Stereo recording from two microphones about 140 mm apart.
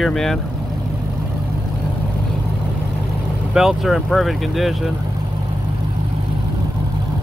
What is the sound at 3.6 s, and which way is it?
Speech, centre (ahead or behind).